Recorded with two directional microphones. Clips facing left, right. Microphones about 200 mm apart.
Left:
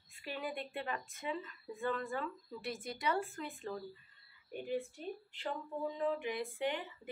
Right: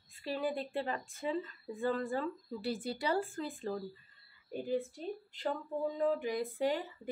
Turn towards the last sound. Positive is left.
turn(degrees=-40)  # may be behind; listen again after turning